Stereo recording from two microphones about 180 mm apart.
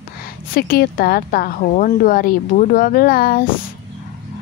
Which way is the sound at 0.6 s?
55° left (ahead or behind).